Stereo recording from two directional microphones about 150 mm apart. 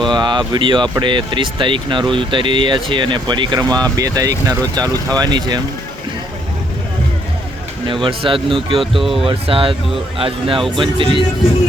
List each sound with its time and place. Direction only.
0.1 s speech: 30° right (ahead or behind)
8.0 s speech: 35° right (ahead or behind)